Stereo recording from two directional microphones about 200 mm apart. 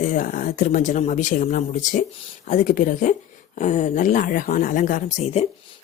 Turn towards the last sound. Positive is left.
turn(degrees=40)  # may be behind; listen again after turning